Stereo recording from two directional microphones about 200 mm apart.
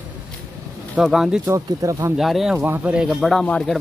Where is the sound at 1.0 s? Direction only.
Centre (ahead or behind).